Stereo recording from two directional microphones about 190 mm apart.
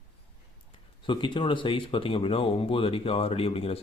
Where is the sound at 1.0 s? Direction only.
25° left (ahead or behind).